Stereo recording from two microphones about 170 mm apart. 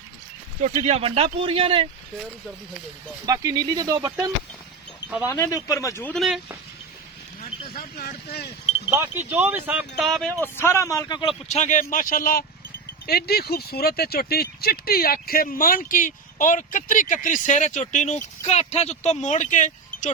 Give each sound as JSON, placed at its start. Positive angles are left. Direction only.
{"t": 0.6, "sound": "speech", "side_deg": -40}
{"t": 3.2, "sound": "speech", "side_deg": -20}
{"t": 5.2, "sound": "speech", "side_deg": 20}
{"t": 6.1, "sound": "speech", "side_deg": 0}
{"t": 7.8, "sound": "speech", "side_deg": 60}
{"t": 8.9, "sound": "speech", "side_deg": -15}
{"t": 10.0, "sound": "speech", "side_deg": 0}
{"t": 10.4, "sound": "speech", "side_deg": 15}
{"t": 11.4, "sound": "speech", "side_deg": 45}